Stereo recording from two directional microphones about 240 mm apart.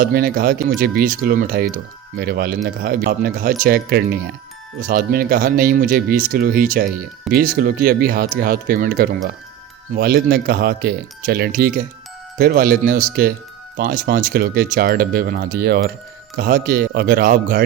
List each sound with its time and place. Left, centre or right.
0.0 s speech: right